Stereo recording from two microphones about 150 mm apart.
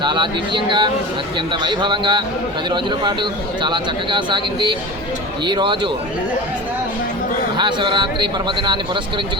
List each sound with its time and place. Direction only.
0.0 s speech: 30° right (ahead or behind)
7.5 s speech: 30° right (ahead or behind)